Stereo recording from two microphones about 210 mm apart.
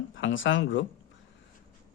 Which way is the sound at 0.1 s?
65° left (ahead or behind).